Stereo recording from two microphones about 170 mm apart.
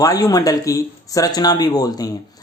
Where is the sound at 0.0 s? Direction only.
20° left (ahead or behind).